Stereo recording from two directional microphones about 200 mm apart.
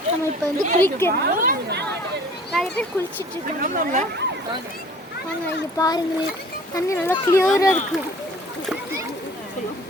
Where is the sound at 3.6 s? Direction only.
40° right (ahead or behind).